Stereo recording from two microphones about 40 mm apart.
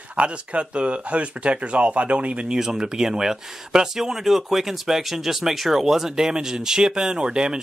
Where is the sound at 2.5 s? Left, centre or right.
Centre.